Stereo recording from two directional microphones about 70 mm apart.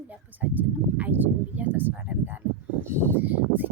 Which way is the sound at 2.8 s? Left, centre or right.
Right.